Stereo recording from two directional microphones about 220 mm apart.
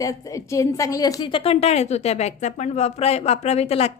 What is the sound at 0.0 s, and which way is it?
A woman's voice, 15° left (ahead or behind).